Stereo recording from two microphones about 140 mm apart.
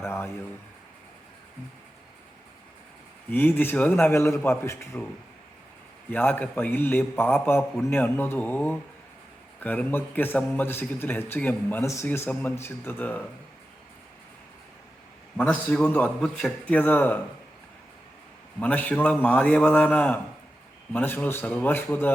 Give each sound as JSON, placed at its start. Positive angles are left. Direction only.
{"t": 0.0, "sound": "a sound", "side_deg": 15}
{"t": 3.2, "sound": "speech", "side_deg": 15}
{"t": 6.1, "sound": "speech", "side_deg": 15}
{"t": 15.4, "sound": "speech", "side_deg": 10}
{"t": 18.6, "sound": "speech", "side_deg": 10}